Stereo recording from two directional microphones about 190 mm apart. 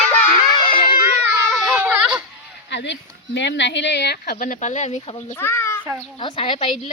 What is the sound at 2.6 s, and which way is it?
A woman's voice, 65° left (ahead or behind).